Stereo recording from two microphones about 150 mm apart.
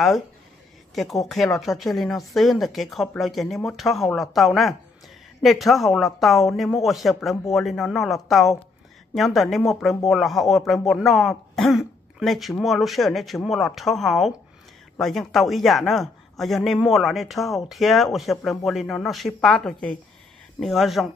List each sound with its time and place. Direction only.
0.9 s speech: centre (ahead or behind)